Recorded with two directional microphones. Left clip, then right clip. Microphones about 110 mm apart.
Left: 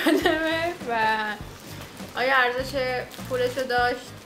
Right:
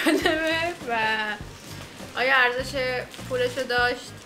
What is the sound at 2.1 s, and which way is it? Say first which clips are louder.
Speech: right 1 dB; 5° left (ahead or behind).